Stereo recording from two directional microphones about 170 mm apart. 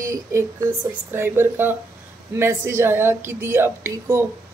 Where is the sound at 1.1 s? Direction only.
15° right (ahead or behind).